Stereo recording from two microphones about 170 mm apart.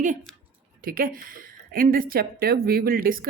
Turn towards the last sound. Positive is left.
turn(degrees=-60)  # may be behind; listen again after turning